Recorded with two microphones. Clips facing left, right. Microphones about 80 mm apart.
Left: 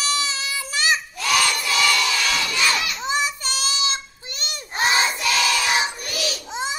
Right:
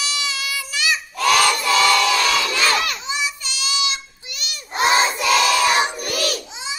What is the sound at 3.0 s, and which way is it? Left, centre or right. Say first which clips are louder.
Child singing: left 3 dB; left.